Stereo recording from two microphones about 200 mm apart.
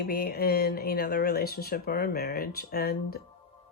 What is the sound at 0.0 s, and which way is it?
Speech, 50° left (ahead or behind).